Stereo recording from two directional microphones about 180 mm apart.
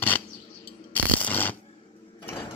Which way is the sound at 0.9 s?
10° left (ahead or behind).